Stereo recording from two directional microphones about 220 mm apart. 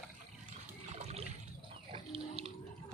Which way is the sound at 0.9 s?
30° right (ahead or behind).